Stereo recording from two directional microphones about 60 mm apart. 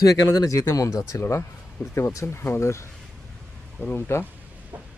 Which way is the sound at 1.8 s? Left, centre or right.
Left.